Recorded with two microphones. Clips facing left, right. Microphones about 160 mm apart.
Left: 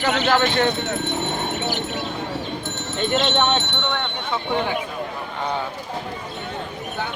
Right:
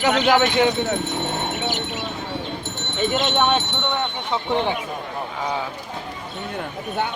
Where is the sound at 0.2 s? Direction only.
15° right (ahead or behind).